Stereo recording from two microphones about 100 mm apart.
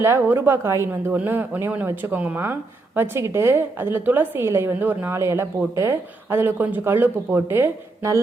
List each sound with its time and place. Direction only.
0.0 s a woman's voice: 25° right (ahead or behind)